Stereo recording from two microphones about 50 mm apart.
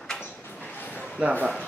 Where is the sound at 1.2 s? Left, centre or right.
Right.